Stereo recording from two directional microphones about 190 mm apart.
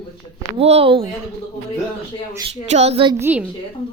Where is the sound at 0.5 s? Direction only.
30° right (ahead or behind).